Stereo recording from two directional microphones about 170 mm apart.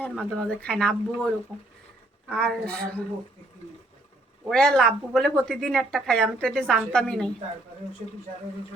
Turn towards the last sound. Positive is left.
turn(degrees=5)  # may be behind; listen again after turning